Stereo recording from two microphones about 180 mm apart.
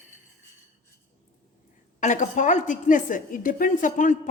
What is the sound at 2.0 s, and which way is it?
A woman's voice, 45° left (ahead or behind).